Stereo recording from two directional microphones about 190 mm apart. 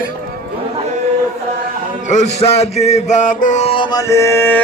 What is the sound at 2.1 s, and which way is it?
Chant, 35° left (ahead or behind).